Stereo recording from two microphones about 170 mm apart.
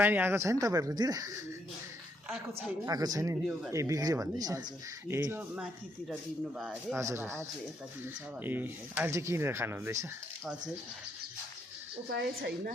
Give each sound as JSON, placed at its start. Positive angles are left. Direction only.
{"t": 0.0, "sound": "speech", "side_deg": -10}
{"t": 2.5, "sound": "speech", "side_deg": -20}
{"t": 6.9, "sound": "speech", "side_deg": -15}
{"t": 12.1, "sound": "a woman's voice", "side_deg": -70}